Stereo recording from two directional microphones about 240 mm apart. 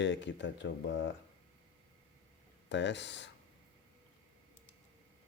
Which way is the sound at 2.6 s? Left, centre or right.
Left.